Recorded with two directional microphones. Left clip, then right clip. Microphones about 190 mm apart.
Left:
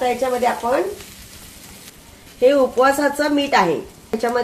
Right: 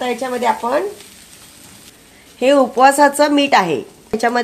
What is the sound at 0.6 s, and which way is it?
Speech, 55° right (ahead or behind).